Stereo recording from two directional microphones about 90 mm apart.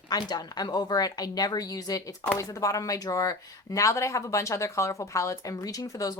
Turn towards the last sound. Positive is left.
turn(degrees=40)  # may be behind; listen again after turning